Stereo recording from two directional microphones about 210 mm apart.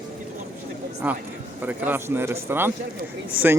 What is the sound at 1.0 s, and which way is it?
A man's voice, 5° right (ahead or behind).